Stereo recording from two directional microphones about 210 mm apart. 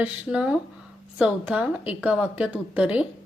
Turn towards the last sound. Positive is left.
turn(degrees=-5)  # may be behind; listen again after turning